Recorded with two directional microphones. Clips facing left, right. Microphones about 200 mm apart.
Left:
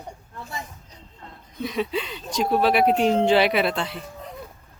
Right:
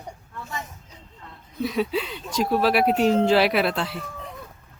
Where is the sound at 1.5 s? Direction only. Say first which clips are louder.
Right 2 dB; centre (ahead or behind).